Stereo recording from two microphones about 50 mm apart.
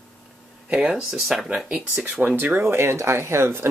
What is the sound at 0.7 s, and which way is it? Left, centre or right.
Speech, centre.